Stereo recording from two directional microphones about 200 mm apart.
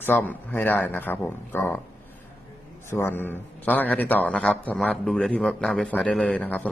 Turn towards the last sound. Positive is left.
turn(degrees=5)  # may be behind; listen again after turning